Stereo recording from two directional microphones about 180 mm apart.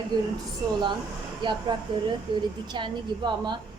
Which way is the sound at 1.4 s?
25° right (ahead or behind).